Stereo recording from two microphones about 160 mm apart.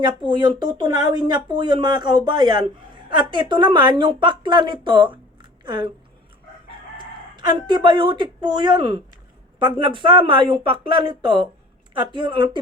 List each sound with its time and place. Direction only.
0.0 s speech: 30° right (ahead or behind)
7.0 s speech: 30° right (ahead or behind)